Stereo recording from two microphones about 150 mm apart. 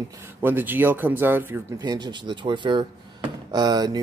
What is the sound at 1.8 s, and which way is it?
Speech, 30° right (ahead or behind).